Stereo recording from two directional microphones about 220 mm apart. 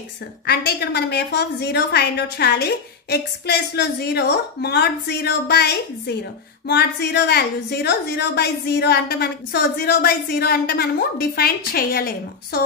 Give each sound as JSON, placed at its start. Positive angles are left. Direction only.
{"t": 0.5, "sound": "a woman's voice", "side_deg": 45}